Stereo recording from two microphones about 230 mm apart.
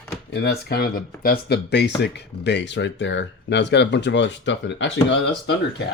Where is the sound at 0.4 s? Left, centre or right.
Left.